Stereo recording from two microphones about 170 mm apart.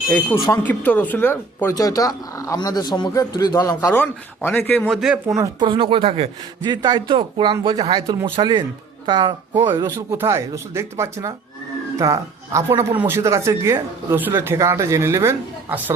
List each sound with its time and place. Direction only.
0.3 s speech: 25° left (ahead or behind)
0.6 s speech: 10° left (ahead or behind)
4.9 s speech: centre (ahead or behind)
5.4 s speech: 25° right (ahead or behind)